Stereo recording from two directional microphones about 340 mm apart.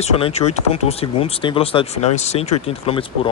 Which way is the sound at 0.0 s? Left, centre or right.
Centre.